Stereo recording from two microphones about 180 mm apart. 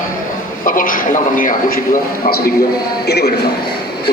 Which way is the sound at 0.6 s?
50° left (ahead or behind).